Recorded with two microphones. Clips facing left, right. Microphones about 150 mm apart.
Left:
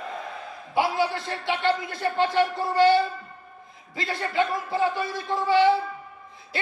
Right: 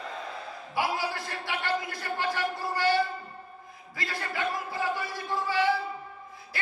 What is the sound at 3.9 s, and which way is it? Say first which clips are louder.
Speech: left 7 dB; 25° left (ahead or behind).